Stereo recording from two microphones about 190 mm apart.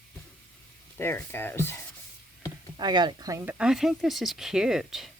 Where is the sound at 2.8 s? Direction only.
25° right (ahead or behind).